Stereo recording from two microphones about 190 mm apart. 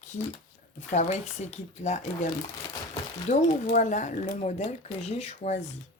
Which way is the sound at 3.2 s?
40° left (ahead or behind).